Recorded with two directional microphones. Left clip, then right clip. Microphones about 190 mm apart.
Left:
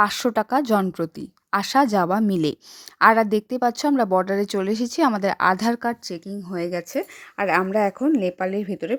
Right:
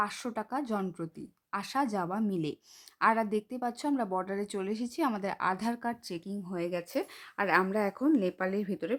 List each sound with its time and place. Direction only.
0.0 s a woman's voice: 40° left (ahead or behind); by 9.0 s 20° left (ahead or behind)